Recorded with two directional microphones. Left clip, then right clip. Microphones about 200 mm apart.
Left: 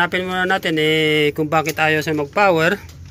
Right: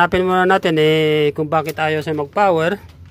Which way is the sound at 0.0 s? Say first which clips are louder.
Right 5 dB; 25° right (ahead or behind).